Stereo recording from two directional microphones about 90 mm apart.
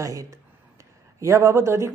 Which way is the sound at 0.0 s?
40° right (ahead or behind).